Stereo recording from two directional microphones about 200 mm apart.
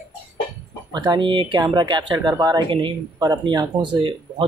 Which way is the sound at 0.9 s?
20° right (ahead or behind).